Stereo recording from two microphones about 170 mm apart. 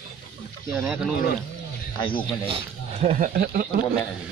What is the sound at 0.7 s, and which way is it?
Speech, 15° right (ahead or behind).